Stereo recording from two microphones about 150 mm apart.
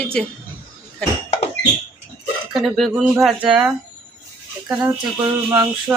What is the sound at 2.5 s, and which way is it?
Speech, centre (ahead or behind).